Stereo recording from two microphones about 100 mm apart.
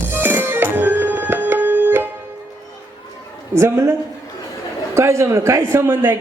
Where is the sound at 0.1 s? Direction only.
20° right (ahead or behind).